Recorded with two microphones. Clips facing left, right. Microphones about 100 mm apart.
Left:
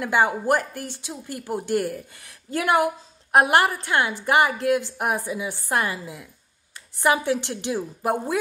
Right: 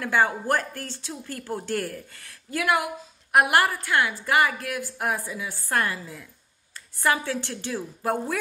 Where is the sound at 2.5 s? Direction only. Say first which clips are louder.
Left 4 dB; 30° left (ahead or behind).